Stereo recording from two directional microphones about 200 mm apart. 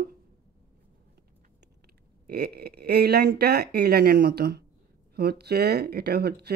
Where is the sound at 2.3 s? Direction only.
50° right (ahead or behind).